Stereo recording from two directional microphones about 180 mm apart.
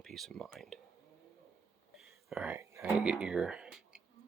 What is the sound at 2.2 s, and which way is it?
Whispering, 5° right (ahead or behind).